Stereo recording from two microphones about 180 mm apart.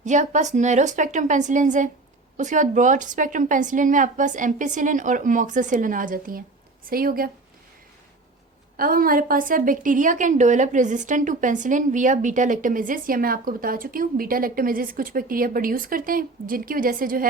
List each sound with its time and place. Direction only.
0.0 s a woman's voice: 40° right (ahead or behind)
8.7 s a woman's voice: 55° right (ahead or behind)